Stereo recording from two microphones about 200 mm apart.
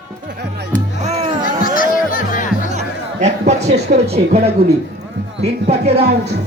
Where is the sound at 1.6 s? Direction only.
45° left (ahead or behind).